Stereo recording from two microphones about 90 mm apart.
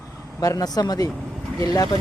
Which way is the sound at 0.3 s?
45° left (ahead or behind).